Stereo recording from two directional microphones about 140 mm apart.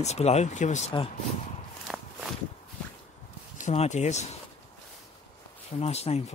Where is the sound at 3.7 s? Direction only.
55° left (ahead or behind).